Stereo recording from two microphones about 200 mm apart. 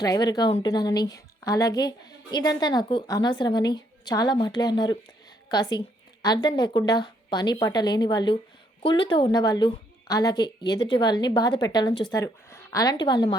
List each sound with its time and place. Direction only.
0.0 s a woman's voice: 20° left (ahead or behind)